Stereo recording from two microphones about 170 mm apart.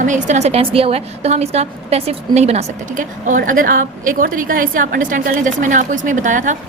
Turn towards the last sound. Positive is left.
turn(degrees=-45)  # may be behind; listen again after turning